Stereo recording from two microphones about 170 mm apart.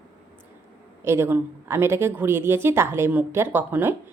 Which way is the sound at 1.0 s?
15° right (ahead or behind).